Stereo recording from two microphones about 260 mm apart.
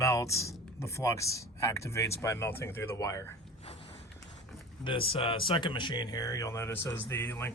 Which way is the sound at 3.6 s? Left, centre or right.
Left.